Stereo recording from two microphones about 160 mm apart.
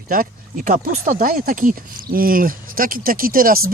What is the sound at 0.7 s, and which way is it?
Speech, 55° right (ahead or behind).